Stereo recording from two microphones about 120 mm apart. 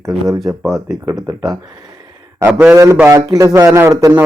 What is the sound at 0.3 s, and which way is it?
Speech, centre (ahead or behind).